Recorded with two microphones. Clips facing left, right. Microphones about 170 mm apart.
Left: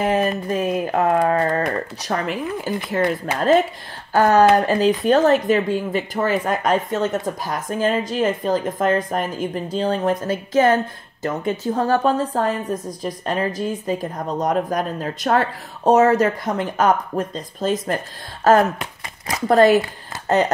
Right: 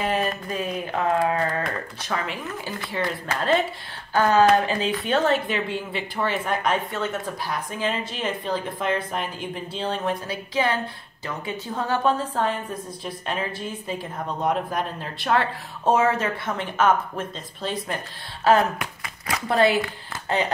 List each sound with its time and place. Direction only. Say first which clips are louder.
0.0 s a woman's voice: left 5 dB; 45° left (ahead or behind)